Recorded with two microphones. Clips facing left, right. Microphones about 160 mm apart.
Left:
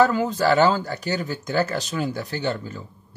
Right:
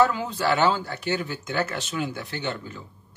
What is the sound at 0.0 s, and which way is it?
Speech, 45° left (ahead or behind).